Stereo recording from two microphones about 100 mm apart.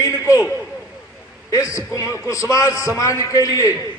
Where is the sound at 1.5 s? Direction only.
35° left (ahead or behind).